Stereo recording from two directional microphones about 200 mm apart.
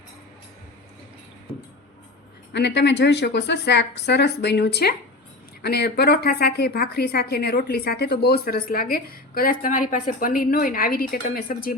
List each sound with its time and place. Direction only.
2.5 s a woman's voice: 60° left (ahead or behind)